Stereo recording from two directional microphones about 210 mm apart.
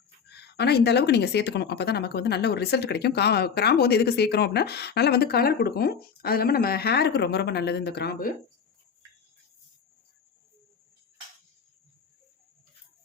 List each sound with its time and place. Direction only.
0.3 s speech: 50° left (ahead or behind)